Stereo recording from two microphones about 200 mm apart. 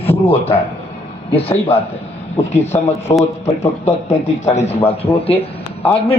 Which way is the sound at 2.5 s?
35° left (ahead or behind).